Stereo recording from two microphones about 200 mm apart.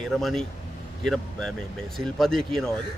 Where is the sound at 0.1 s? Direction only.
Centre (ahead or behind).